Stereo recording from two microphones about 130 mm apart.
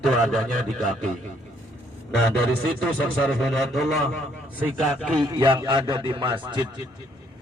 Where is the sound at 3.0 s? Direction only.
10° left (ahead or behind).